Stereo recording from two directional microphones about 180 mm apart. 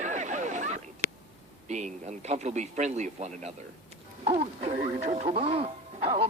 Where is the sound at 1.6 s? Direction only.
40° right (ahead or behind).